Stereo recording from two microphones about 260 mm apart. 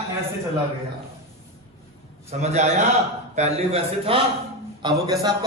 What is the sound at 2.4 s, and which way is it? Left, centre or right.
A man's voice, right.